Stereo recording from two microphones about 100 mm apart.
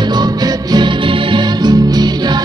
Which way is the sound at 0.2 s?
45° right (ahead or behind).